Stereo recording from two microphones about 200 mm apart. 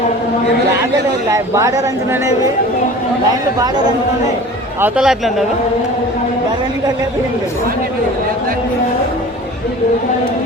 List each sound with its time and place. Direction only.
1.3 s a woman's voice: 15° right (ahead or behind)
4.8 s speech: 5° right (ahead or behind)